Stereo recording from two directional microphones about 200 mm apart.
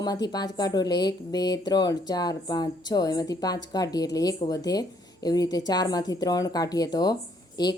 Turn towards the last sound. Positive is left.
turn(degrees=20)  # may be behind; listen again after turning